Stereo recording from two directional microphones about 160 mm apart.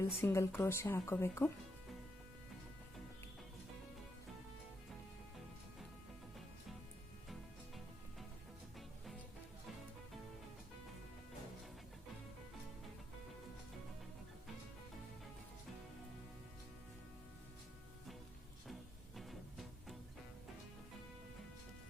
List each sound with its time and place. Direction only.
0.0 s speech: 15° left (ahead or behind)
18.7 s music: centre (ahead or behind)